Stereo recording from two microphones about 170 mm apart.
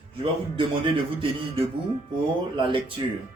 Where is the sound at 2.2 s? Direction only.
30° right (ahead or behind).